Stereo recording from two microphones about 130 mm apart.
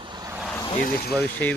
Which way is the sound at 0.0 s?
35° right (ahead or behind).